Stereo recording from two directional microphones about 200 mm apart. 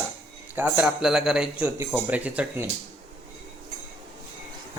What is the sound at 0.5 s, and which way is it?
A man's voice, 10° right (ahead or behind).